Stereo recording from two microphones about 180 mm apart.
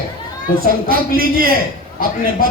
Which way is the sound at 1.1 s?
55° right (ahead or behind).